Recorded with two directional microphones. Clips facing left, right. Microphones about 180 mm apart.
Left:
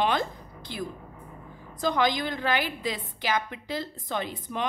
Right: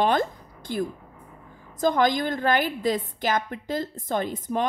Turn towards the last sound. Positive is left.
turn(degrees=-45)  # may be behind; listen again after turning